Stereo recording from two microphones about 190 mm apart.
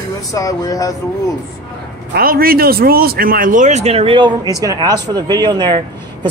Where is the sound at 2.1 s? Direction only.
50° right (ahead or behind).